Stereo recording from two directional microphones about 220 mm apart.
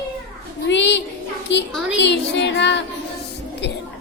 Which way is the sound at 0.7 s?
50° left (ahead or behind).